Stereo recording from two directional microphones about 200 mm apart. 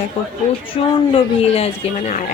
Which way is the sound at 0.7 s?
30° left (ahead or behind).